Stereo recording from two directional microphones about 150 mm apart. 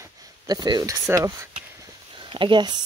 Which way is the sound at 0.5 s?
30° right (ahead or behind).